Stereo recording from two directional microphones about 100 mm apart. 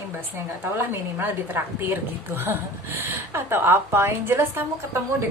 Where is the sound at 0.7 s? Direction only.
25° right (ahead or behind).